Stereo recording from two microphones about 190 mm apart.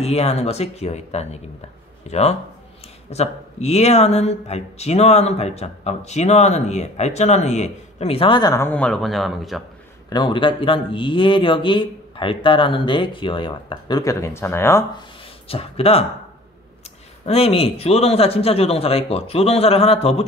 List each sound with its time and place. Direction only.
0.0 s speech: 35° left (ahead or behind); by 9.6 s centre (ahead or behind)
10.0 s a man's voice: 25° left (ahead or behind)
15.4 s speech: 30° left (ahead or behind)
17.3 s speech: 30° left (ahead or behind)